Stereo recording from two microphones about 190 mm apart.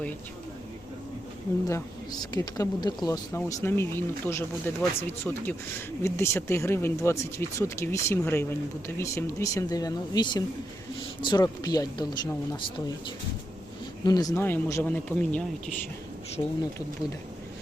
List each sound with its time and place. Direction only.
1.6 s speech: 20° left (ahead or behind)
14.0 s speech: 20° left (ahead or behind); by 15.7 s 5° left (ahead or behind)